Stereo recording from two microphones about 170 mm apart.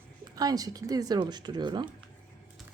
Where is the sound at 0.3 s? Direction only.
20° right (ahead or behind).